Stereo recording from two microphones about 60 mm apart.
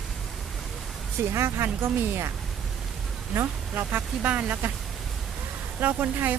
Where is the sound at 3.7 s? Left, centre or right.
Right.